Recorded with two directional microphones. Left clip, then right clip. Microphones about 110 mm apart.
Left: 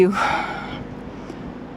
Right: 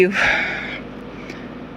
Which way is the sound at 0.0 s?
35° left (ahead or behind).